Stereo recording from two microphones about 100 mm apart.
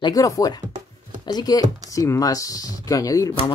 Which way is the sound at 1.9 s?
35° left (ahead or behind).